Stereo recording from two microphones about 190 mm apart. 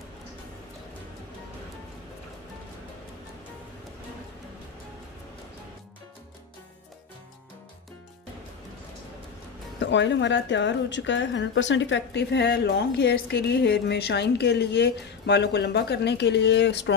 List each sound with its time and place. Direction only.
9.8 s a woman's voice: 70° left (ahead or behind)